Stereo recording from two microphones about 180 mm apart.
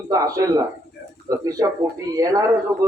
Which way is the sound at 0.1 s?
20° right (ahead or behind).